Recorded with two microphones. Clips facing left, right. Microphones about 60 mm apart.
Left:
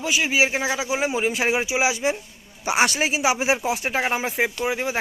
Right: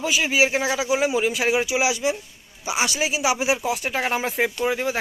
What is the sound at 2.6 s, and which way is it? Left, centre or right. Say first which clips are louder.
Speech: left 3 dB; left.